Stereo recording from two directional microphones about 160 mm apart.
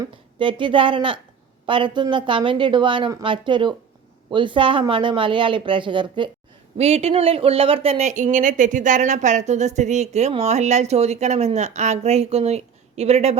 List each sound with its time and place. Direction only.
0.0 s speech: 30° right (ahead or behind)